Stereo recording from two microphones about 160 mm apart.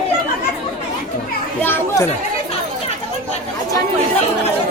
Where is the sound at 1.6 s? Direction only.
15° left (ahead or behind).